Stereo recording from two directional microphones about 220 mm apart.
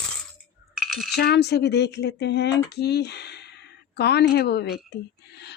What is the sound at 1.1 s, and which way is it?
A woman's voice, 50° left (ahead or behind).